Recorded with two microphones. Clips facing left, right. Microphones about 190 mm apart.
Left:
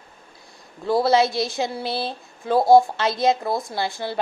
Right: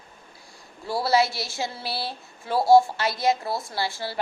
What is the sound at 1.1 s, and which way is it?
A woman's voice, 20° left (ahead or behind).